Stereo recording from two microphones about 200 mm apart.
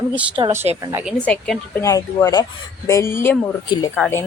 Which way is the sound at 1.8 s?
15° left (ahead or behind).